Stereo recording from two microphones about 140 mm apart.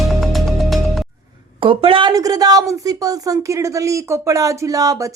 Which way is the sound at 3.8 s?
25° right (ahead or behind).